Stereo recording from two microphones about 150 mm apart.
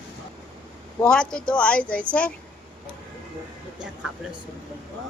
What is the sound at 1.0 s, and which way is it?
Speech, 5° left (ahead or behind).